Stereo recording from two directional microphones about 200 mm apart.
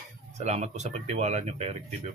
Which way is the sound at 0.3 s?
35° right (ahead or behind).